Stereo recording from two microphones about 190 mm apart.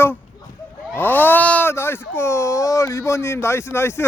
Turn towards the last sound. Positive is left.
turn(degrees=15)  # may be behind; listen again after turning